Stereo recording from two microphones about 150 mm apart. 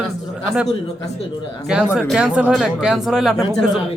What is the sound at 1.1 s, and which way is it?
Speech, 45° left (ahead or behind).